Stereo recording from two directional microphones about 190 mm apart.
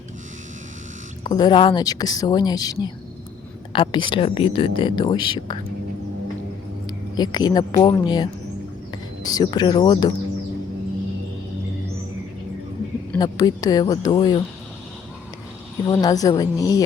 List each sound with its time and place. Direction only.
1.2 s speech: 20° left (ahead or behind)
6.8 s speech: 20° left (ahead or behind)
13.1 s speech: 20° left (ahead or behind)
15.9 s speech: 20° left (ahead or behind)